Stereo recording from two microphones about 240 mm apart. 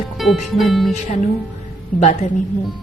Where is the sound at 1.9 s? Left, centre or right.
Left.